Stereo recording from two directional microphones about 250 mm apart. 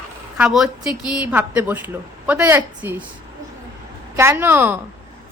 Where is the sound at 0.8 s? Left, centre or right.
Centre.